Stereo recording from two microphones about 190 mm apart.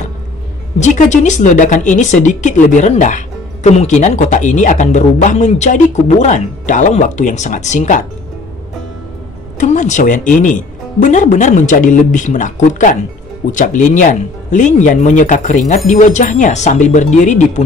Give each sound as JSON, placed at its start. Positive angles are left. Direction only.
{"t": 0.7, "sound": "a woman's voice", "side_deg": 40}
{"t": 9.6, "sound": "a woman's voice", "side_deg": 40}